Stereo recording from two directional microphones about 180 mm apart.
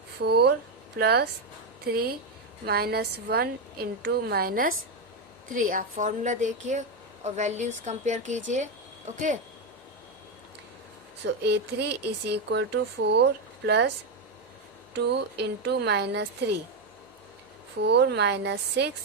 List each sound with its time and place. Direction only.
0.2 s a woman's voice: 65° right (ahead or behind); by 9.4 s 40° right (ahead or behind)
11.4 s speech: 65° right (ahead or behind)
14.9 s speech: 70° right (ahead or behind)
17.8 s speech: 70° right (ahead or behind)